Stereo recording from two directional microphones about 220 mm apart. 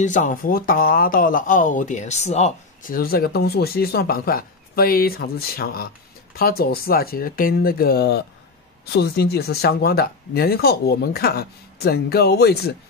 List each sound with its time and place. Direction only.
0.0 s speech: 35° left (ahead or behind)